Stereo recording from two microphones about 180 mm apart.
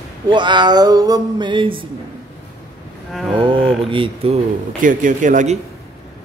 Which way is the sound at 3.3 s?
30° right (ahead or behind).